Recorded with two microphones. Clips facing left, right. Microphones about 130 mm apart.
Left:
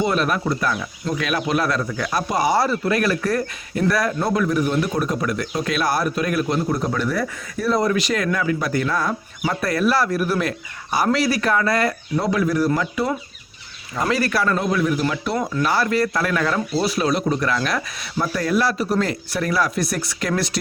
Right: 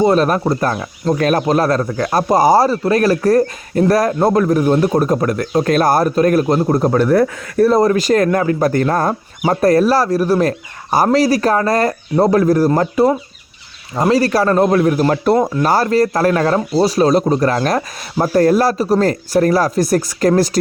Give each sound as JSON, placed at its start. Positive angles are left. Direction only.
{"t": 0.0, "sound": "speech", "side_deg": -40}
{"t": 13.9, "sound": "speech", "side_deg": -30}